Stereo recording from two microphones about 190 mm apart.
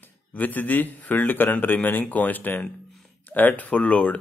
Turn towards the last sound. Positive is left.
turn(degrees=5)  # may be behind; listen again after turning